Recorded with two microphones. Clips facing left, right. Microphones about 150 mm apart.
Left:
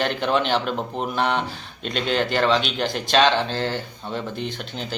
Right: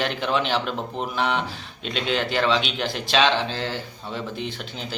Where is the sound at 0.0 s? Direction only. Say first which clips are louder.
Left 2 dB; centre (ahead or behind).